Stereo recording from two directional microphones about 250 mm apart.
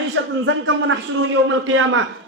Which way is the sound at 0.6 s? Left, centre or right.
Right.